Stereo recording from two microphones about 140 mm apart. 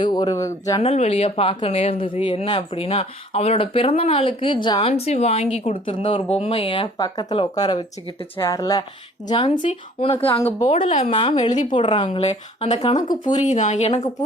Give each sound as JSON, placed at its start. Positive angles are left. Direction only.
{"t": 0.0, "sound": "speech", "side_deg": 30}
{"t": 0.8, "sound": "speech", "side_deg": 50}
{"t": 4.9, "sound": "speech", "side_deg": 50}
{"t": 10.4, "sound": "speech", "side_deg": 55}
{"t": 10.8, "sound": "speech", "side_deg": 65}
{"t": 11.0, "sound": "speech", "side_deg": 40}
{"t": 11.7, "sound": "speech", "side_deg": 35}
{"t": 13.0, "sound": "speech", "side_deg": 65}